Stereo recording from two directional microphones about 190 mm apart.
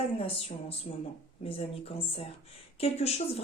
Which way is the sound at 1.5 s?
30° left (ahead or behind).